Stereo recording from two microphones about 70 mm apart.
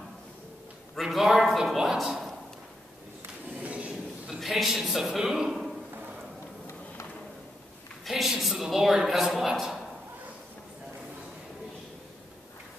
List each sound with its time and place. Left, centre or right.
0.9 s a man's voice: centre
3.6 s a sound: centre
4.4 s a man's voice: centre
8.0 s a man's voice: centre